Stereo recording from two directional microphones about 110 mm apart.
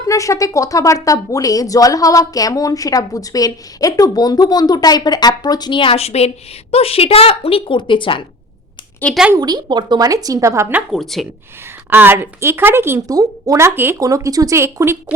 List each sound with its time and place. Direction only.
0.1 s speech: 30° left (ahead or behind); by 8.2 s 50° left (ahead or behind)
9.1 s speech: 10° left (ahead or behind)
9.4 s a woman's voice: 40° right (ahead or behind)
10.9 s speech: centre (ahead or behind)
11.9 s a woman's voice: 20° right (ahead or behind)
13.1 s a woman's voice: 35° right (ahead or behind)